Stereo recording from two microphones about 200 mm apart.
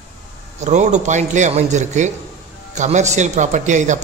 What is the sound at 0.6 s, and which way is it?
A man's voice, 35° right (ahead or behind).